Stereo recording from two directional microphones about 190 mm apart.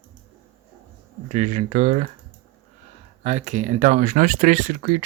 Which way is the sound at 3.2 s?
40° right (ahead or behind).